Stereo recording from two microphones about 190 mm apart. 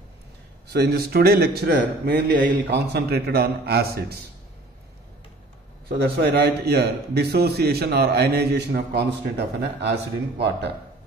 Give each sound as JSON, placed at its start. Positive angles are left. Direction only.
{"t": 0.7, "sound": "a man's voice", "side_deg": -55}
{"t": 5.9, "sound": "a man's voice", "side_deg": -55}